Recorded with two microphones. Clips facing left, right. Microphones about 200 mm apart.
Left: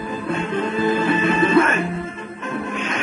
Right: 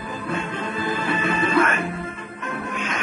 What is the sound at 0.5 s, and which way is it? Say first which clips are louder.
Music: left 7 dB; 25° left (ahead or behind).